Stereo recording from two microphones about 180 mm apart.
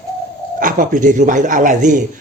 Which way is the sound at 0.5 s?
45° right (ahead or behind).